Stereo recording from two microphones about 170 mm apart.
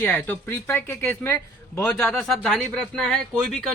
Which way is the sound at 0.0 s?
10° left (ahead or behind).